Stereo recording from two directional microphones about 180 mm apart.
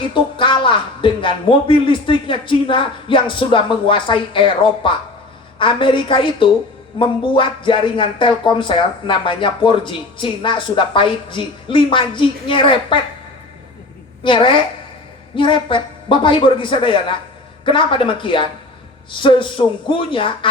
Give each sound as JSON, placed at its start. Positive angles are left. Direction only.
{"t": 0.0, "sound": "speech", "side_deg": 30}
{"t": 14.3, "sound": "speech", "side_deg": 25}